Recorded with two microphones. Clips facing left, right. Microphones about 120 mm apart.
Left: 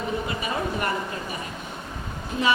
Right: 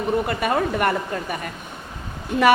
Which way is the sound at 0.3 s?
55° right (ahead or behind).